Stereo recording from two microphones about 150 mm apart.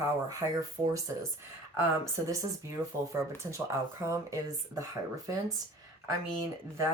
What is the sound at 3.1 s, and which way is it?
Speech, 20° right (ahead or behind).